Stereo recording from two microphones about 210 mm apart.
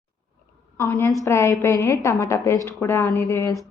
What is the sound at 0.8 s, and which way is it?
A woman's voice, 10° left (ahead or behind).